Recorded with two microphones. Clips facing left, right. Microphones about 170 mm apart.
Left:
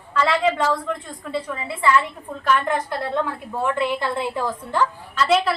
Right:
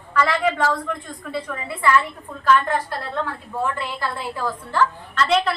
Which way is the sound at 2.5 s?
20° left (ahead or behind).